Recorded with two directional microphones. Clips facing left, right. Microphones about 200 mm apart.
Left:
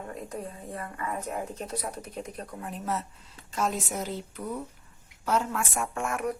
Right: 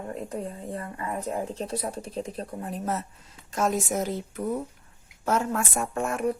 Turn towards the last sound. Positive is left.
turn(degrees=-30)  # may be behind; listen again after turning